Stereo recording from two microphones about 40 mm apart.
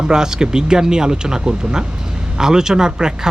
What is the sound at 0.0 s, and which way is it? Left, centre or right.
Speech, centre.